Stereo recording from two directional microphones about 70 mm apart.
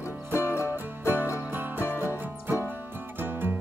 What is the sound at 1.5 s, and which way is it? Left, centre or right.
Music, right.